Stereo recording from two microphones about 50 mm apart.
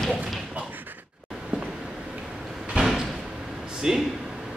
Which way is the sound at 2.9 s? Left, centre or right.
Centre.